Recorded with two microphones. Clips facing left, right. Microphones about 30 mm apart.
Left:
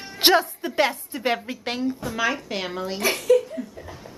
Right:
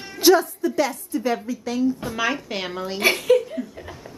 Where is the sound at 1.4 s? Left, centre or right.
Left.